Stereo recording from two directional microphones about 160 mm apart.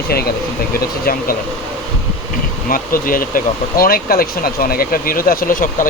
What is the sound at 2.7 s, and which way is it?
Speech, 60° left (ahead or behind).